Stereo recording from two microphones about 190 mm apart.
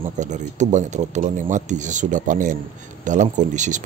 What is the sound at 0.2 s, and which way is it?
A man's voice, 40° right (ahead or behind).